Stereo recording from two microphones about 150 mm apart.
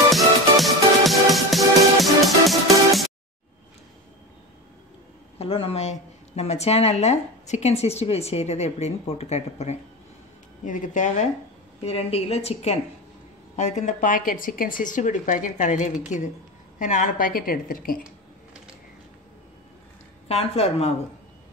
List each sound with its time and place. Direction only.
0.1 s music: centre (ahead or behind)
5.4 s speech: 40° left (ahead or behind)
10.6 s a woman's voice: 60° left (ahead or behind)
11.8 s a woman's voice: 45° left (ahead or behind); by 18.0 s 70° left (ahead or behind)
20.2 s a woman's voice: 45° left (ahead or behind)